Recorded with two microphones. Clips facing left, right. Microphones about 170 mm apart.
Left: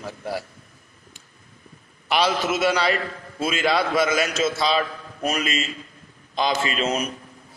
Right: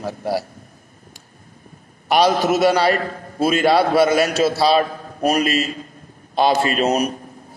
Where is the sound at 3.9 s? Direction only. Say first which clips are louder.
Right 6 dB; 35° right (ahead or behind).